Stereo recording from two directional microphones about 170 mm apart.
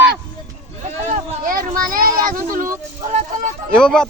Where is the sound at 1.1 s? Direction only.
50° right (ahead or behind).